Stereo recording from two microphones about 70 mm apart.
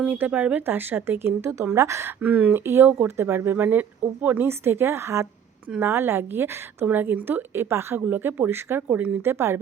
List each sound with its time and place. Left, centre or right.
0.1 s speech: right
2.2 s speech: right
2.6 s speech: right